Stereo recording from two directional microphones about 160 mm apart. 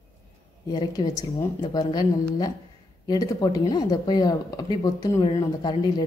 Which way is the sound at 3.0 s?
25° left (ahead or behind).